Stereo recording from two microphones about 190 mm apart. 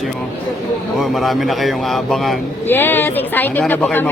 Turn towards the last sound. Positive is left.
turn(degrees=10)  # may be behind; listen again after turning